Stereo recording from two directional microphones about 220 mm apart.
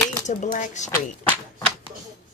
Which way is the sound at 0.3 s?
35° left (ahead or behind).